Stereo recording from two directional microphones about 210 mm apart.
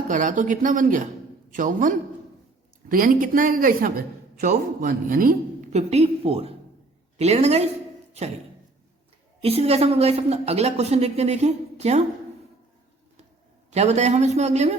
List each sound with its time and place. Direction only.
0.1 s a woman's voice: 35° right (ahead or behind)
2.9 s a woman's voice: 40° right (ahead or behind)
9.4 s a woman's voice: 30° right (ahead or behind)
13.7 s a woman's voice: 30° right (ahead or behind)